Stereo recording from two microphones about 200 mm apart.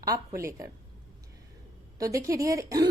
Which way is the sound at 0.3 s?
15° right (ahead or behind).